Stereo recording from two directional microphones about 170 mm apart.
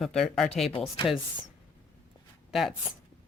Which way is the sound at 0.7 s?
35° left (ahead or behind).